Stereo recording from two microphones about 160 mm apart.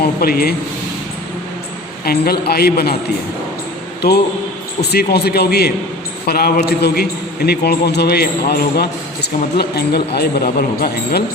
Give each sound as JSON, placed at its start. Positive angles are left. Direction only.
{"t": 0.0, "sound": "speech", "side_deg": 70}
{"t": 2.0, "sound": "speech", "side_deg": 75}
{"t": 4.0, "sound": "a man's voice", "side_deg": 90}
{"t": 6.2, "sound": "a man's voice", "side_deg": 70}
{"t": 10.2, "sound": "speech", "side_deg": 70}